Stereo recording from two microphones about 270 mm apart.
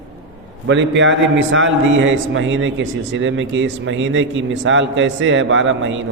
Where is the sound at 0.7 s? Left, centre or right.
Right.